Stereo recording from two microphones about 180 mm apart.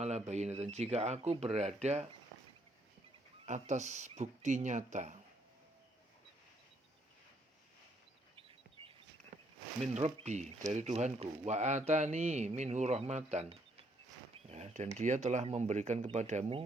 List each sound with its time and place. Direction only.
0.0 s speech: 40° right (ahead or behind)
3.4 s speech: 40° right (ahead or behind)
8.4 s a sound: 30° right (ahead or behind)
9.9 s speech: 40° right (ahead or behind)